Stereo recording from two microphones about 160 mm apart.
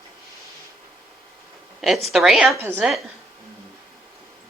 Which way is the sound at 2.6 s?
15° right (ahead or behind).